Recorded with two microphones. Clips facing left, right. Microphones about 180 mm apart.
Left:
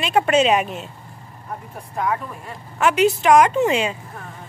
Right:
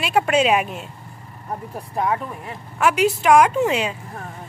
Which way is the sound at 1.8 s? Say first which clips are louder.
Right 1 dB; 30° right (ahead or behind).